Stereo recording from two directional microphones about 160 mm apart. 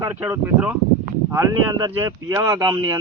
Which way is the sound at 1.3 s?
20° right (ahead or behind).